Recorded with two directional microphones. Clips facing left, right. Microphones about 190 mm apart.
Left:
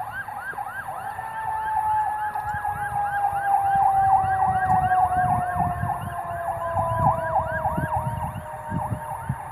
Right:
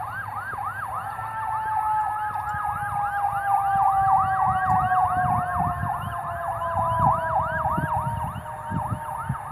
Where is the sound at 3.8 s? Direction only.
25° left (ahead or behind).